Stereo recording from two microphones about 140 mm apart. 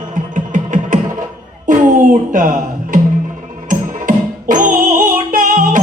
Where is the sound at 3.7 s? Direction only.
75° right (ahead or behind).